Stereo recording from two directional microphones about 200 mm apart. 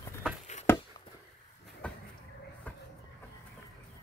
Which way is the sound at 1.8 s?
5° left (ahead or behind).